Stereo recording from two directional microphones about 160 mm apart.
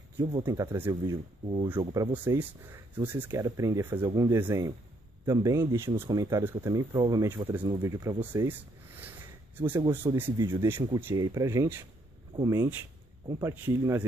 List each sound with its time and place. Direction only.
0.5 s speech: 20° right (ahead or behind)